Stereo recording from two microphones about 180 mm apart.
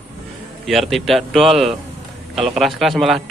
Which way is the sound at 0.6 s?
Centre (ahead or behind).